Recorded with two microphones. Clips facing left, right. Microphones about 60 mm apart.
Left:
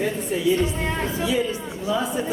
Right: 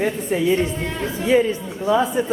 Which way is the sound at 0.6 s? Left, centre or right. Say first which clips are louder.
Even; centre.